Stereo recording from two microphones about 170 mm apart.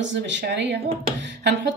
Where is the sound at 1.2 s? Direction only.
85° right.